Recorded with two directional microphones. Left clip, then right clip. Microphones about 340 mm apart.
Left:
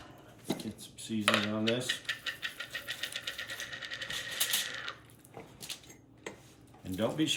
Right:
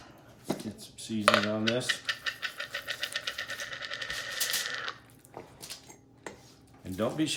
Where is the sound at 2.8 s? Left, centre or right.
Centre.